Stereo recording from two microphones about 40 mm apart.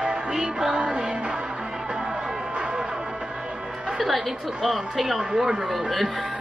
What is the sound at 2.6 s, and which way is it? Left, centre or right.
Music, right.